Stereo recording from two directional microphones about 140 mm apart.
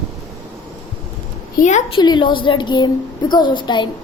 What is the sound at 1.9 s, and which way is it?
A woman's voice, 35° left (ahead or behind).